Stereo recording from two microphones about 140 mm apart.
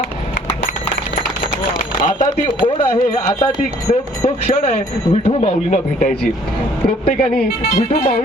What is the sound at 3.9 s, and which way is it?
A man's voice, 55° left (ahead or behind).